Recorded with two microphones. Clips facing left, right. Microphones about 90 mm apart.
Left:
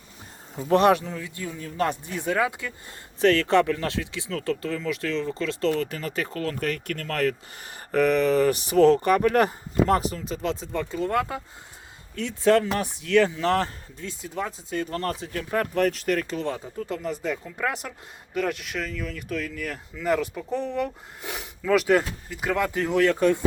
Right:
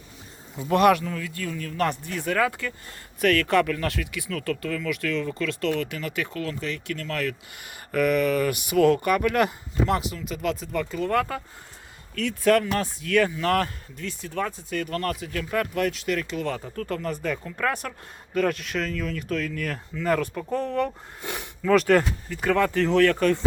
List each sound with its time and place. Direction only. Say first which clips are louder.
0.5 s speech: even; 35° left (ahead or behind); by 2.7 s 15° left (ahead or behind)
3.2 s speech: left 2 dB; 25° left (ahead or behind)
6.6 s speech: left 2 dB; 50° left (ahead or behind)
16.5 s speech: right 1 dB; 15° left (ahead or behind)